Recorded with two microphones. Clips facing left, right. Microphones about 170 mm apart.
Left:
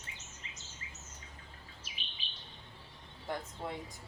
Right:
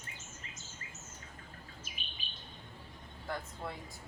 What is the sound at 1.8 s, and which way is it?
Bird, 45° right (ahead or behind).